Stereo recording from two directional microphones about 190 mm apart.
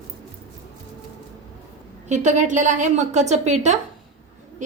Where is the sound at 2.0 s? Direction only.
40° right (ahead or behind).